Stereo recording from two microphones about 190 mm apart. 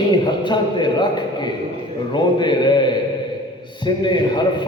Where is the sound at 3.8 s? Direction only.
25° left (ahead or behind).